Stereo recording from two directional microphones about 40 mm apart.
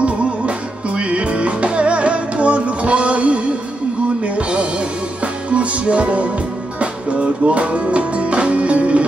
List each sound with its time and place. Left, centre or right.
0.0 s music: right